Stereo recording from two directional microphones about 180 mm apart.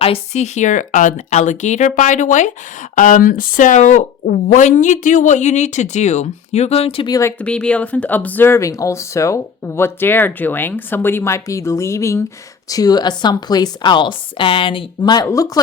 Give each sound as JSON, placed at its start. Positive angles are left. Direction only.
{"t": 0.0, "sound": "speech", "side_deg": 35}
{"t": 7.2, "sound": "a woman's voice", "side_deg": 10}